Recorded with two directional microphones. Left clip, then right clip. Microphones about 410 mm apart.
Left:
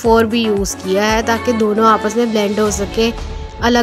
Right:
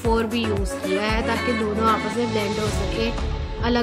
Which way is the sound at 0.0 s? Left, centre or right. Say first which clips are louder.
Left 10 dB; left.